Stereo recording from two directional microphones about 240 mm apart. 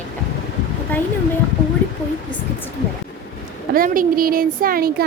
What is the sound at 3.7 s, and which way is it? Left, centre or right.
A woman's voice, right.